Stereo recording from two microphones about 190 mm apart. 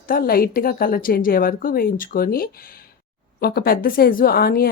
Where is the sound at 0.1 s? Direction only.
50° left (ahead or behind).